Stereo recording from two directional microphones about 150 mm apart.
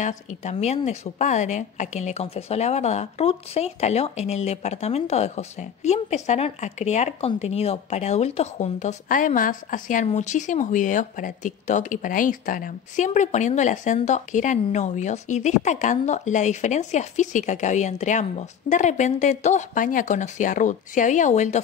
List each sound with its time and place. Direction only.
0.0 s a woman's voice: 55° left (ahead or behind)